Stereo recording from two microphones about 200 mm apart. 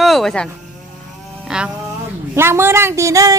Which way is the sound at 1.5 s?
5° right (ahead or behind).